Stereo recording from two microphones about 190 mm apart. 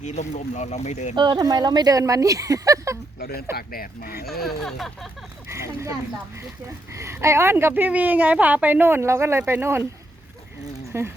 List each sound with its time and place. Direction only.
0.0 s speech: 40° left (ahead or behind)
1.1 s a woman's voice: 25° right (ahead or behind)
3.2 s speech: 55° left (ahead or behind)
4.4 s speech: centre (ahead or behind)
5.5 s speech: 15° right (ahead or behind)
6.9 s a woman's voice: 15° right (ahead or behind)
10.9 s a woman's voice: 15° right (ahead or behind)